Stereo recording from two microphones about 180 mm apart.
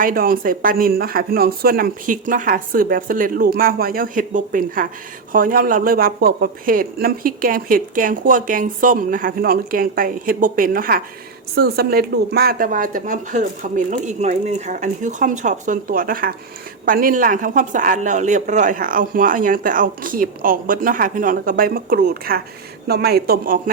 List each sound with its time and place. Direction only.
0.0 s a man's voice: 50° right (ahead or behind)